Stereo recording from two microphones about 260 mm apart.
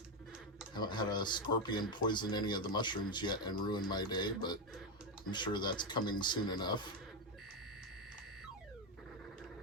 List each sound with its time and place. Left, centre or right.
0.7 s speech: centre